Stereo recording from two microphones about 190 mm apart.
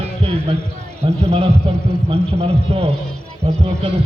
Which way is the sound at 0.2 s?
30° right (ahead or behind).